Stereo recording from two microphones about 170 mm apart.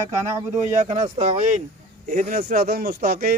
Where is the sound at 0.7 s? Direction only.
40° right (ahead or behind).